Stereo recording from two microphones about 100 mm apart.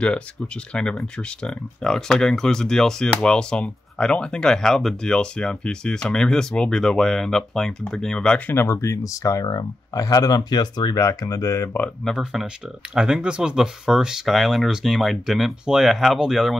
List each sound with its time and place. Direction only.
0.7 s speech: 10° left (ahead or behind)
8.5 s speech: 25° left (ahead or behind)
12.2 s speech: 5° right (ahead or behind)